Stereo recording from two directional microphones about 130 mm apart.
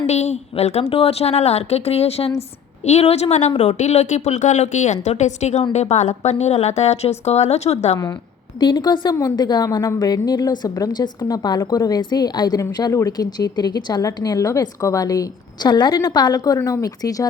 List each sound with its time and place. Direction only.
0.0 s a woman's voice: 60° left (ahead or behind)
8.5 s a woman's voice: 35° left (ahead or behind)